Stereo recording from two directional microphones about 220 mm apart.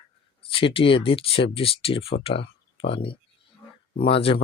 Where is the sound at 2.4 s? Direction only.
50° left (ahead or behind).